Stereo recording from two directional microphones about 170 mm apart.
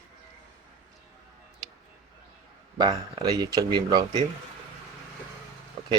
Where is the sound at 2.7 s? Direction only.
25° right (ahead or behind).